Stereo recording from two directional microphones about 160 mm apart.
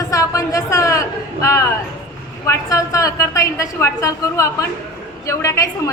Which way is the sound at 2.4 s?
20° left (ahead or behind).